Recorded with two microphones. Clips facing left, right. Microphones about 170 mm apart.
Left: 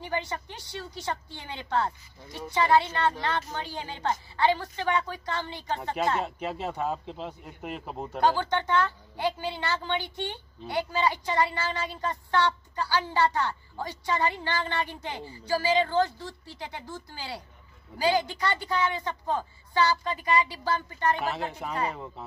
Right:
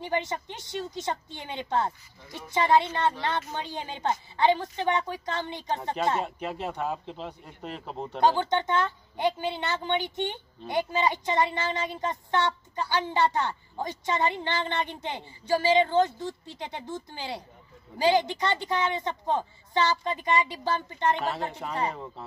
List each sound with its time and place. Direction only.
0.0 s speech: 20° right (ahead or behind)
6.7 s speech: 5° left (ahead or behind)
8.2 s speech: 20° right (ahead or behind)
21.2 s speech: 5° left (ahead or behind)